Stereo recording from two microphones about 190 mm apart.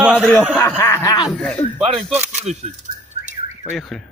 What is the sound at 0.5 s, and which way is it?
Snicker, 10° left (ahead or behind).